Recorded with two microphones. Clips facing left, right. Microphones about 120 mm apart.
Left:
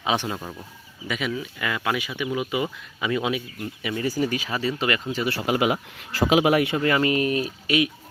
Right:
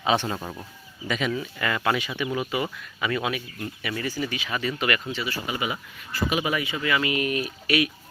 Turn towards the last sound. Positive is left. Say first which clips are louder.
# left 1 dB
turn(degrees=25)  # may be behind; listen again after turning